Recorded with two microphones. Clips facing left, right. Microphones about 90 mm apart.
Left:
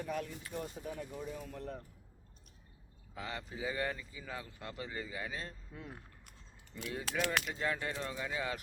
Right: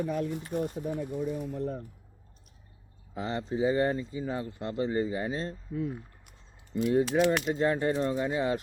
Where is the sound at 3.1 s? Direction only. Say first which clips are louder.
Right 11 dB; 30° right (ahead or behind).